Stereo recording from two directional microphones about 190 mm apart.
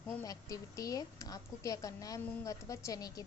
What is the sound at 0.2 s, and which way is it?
A woman's voice, 20° left (ahead or behind).